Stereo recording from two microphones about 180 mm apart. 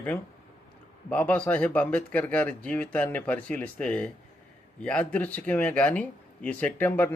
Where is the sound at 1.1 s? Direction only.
5° left (ahead or behind).